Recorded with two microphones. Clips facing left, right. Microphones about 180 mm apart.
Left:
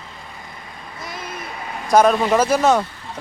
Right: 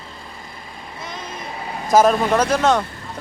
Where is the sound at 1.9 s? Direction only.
Centre (ahead or behind).